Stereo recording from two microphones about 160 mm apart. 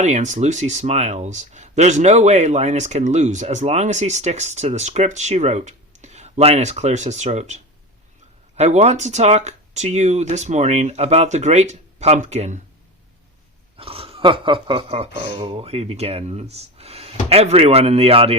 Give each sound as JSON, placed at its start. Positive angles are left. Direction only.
{"t": 0.0, "sound": "speech", "side_deg": -50}
{"t": 13.7, "sound": "speech", "side_deg": -35}